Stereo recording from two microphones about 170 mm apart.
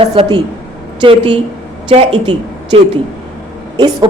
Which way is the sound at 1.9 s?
30° right (ahead or behind).